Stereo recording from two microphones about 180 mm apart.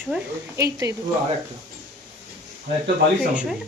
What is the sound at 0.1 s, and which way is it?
Speech, 15° right (ahead or behind).